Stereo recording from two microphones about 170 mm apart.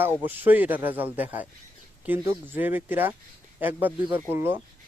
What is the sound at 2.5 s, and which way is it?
Speech, 10° right (ahead or behind).